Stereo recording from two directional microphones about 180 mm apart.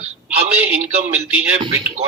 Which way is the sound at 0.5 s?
10° right (ahead or behind).